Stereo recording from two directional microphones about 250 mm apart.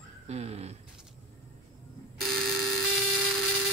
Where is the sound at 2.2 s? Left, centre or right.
Centre.